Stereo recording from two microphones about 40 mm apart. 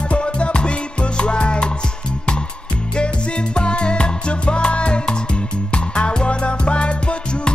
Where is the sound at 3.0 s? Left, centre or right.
Left.